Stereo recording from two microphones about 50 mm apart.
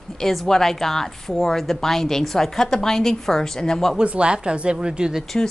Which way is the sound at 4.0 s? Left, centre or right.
Right.